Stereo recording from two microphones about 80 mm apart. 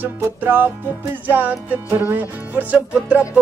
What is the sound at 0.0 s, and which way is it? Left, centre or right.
Music, right.